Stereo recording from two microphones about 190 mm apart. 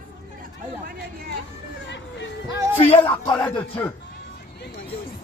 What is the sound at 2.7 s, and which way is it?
Speech, 30° left (ahead or behind).